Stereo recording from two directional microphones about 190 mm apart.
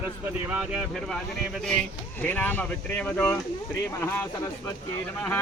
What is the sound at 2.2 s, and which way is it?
Speech, 10° left (ahead or behind).